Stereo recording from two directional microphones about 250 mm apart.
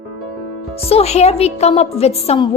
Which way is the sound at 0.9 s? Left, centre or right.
Left.